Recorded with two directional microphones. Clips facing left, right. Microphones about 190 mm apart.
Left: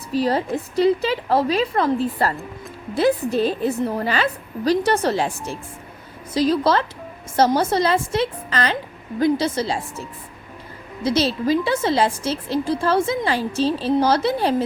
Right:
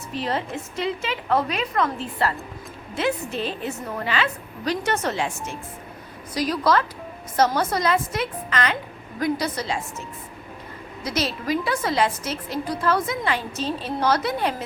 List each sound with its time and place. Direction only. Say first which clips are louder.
0.1 s a woman's voice: left 7 dB; 35° left (ahead or behind)
11.0 s a woman's voice: left 7 dB; 30° left (ahead or behind)